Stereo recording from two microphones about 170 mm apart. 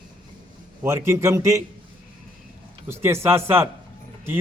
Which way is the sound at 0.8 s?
15° right (ahead or behind).